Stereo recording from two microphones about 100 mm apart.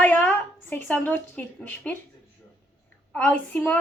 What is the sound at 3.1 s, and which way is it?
Speech, 15° left (ahead or behind).